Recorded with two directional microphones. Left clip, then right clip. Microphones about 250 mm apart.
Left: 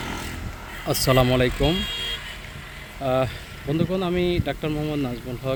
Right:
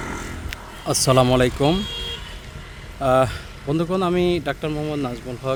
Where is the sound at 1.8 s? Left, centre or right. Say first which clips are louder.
Left 1 dB; centre.